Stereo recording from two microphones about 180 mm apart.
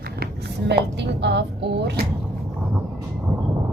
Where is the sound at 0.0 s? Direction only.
60° right (ahead or behind).